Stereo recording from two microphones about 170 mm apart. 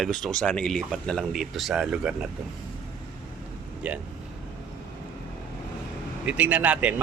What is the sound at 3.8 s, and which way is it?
Speech, 5° right (ahead or behind).